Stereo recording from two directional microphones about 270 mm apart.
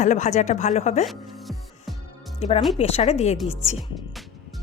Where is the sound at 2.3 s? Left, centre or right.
Left.